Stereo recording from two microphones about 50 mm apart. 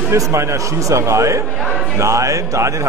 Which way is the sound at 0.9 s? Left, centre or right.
Right.